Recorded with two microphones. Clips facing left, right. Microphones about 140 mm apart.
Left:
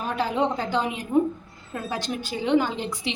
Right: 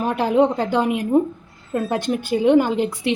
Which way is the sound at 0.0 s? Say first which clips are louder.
Right 7 dB; 55° right (ahead or behind).